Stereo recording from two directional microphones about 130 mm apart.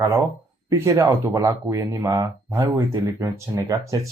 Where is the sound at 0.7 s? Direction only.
25° right (ahead or behind).